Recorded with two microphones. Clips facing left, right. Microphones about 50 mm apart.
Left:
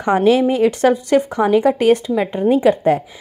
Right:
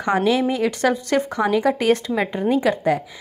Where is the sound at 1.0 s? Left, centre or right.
Centre.